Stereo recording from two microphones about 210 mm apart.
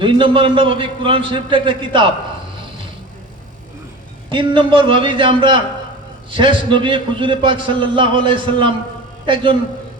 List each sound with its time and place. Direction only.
0.0 s a man's voice: 25° right (ahead or behind)
4.3 s a man's voice: 25° right (ahead or behind)